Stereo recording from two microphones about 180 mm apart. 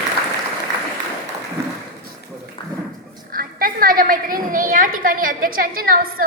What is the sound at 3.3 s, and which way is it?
A woman's voice, 55° right (ahead or behind).